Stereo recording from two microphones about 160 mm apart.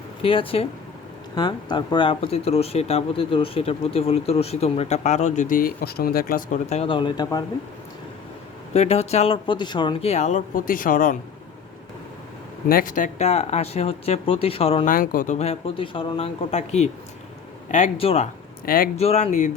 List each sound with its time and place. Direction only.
0.2 s speech: 35° left (ahead or behind); by 6.6 s 65° left (ahead or behind)
6.7 s speech: 40° left (ahead or behind)
6.9 s speech: 25° left (ahead or behind)
8.7 s speech: 40° left (ahead or behind)
10.1 s speech: 50° left (ahead or behind)
12.6 s speech: 60° left (ahead or behind); by 14.8 s 35° left (ahead or behind)
14.8 s speech: 60° left (ahead or behind); by 18.3 s 40° left (ahead or behind)
18.6 s speech: 65° left (ahead or behind)
18.9 s speech: 40° left (ahead or behind)